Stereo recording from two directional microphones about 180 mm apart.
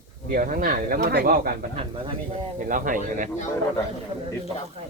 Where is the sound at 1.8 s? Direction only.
30° right (ahead or behind).